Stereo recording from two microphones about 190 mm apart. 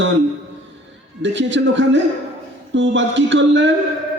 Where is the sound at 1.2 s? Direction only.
70° right (ahead or behind).